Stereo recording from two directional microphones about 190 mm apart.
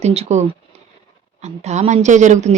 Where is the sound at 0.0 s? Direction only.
35° right (ahead or behind).